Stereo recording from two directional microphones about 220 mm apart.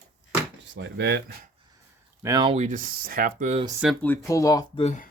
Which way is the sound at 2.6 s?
40° right (ahead or behind).